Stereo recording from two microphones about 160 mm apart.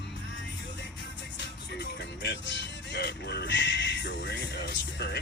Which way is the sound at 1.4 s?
90° left.